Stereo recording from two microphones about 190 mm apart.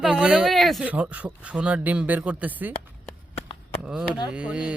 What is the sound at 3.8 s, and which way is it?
Speech, 5° right (ahead or behind).